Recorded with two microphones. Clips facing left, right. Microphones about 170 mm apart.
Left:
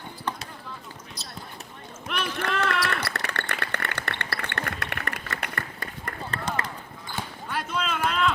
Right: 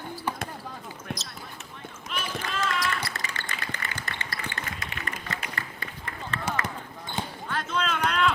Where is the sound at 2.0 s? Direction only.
60° left (ahead or behind); by 6.4 s 45° left (ahead or behind).